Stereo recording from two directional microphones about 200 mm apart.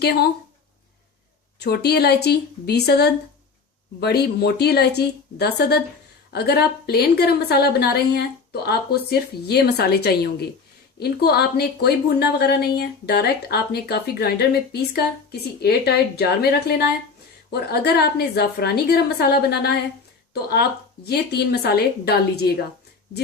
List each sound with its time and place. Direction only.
0.0 s a woman's voice: 55° left (ahead or behind)
1.5 s a woman's voice: 55° left (ahead or behind)
21.1 s a woman's voice: 55° left (ahead or behind)